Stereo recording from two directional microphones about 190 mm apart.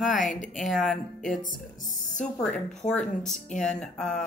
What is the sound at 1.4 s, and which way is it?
Speech, 45° left (ahead or behind).